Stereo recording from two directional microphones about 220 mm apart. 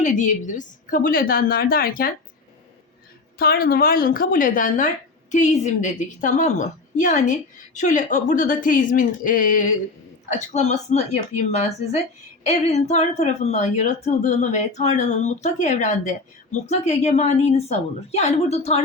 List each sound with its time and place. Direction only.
0.0 s a woman's voice: 35° left (ahead or behind)
3.3 s a woman's voice: 45° left (ahead or behind)